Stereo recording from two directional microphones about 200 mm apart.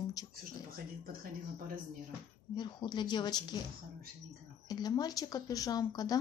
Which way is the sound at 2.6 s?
20° left (ahead or behind).